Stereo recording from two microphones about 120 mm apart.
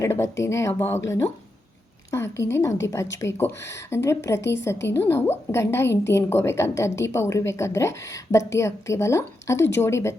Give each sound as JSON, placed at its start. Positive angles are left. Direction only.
{"t": 0.0, "sound": "speech", "side_deg": 25}